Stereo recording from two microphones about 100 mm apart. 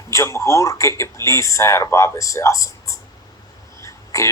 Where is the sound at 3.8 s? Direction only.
30° left (ahead or behind).